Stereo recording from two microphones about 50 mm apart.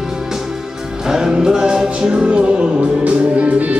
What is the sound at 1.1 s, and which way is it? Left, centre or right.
Music, centre.